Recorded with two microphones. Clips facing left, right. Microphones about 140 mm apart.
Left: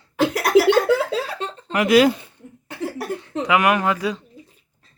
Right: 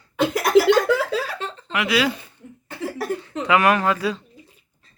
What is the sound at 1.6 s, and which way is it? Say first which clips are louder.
Speech: left 7 dB; 40° left (ahead or behind).